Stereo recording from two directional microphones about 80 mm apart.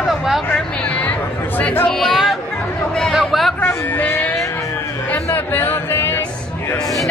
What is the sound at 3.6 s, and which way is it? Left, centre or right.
Music, left.